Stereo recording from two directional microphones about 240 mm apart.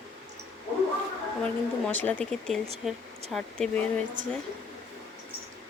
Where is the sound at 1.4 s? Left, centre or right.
Centre.